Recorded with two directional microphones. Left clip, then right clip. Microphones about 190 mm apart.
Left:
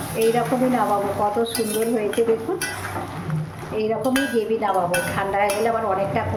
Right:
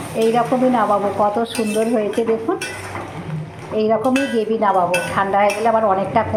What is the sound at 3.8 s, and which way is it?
A woman's voice, 15° right (ahead or behind).